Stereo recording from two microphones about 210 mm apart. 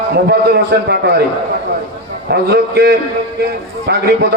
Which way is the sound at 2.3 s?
50° right (ahead or behind).